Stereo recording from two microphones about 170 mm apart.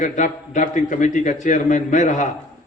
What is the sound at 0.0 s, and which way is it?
A man's voice, 45° left (ahead or behind).